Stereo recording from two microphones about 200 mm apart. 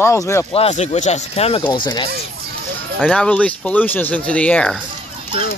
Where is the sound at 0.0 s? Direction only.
15° left (ahead or behind).